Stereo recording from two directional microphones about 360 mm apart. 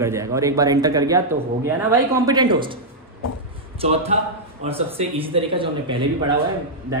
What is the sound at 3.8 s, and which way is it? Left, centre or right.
A man's voice, centre.